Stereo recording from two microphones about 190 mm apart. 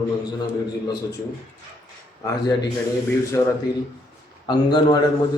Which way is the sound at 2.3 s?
20° left (ahead or behind).